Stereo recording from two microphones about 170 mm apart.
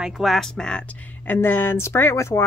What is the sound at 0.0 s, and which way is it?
Speech, centre (ahead or behind).